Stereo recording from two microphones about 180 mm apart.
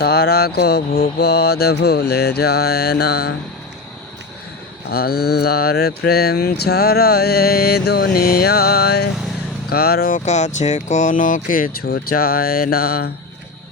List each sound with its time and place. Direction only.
0.0 s speech: 60° left (ahead or behind)
4.9 s speech: 60° left (ahead or behind)
10.2 s speech: 40° left (ahead or behind); by 13.1 s 60° left (ahead or behind)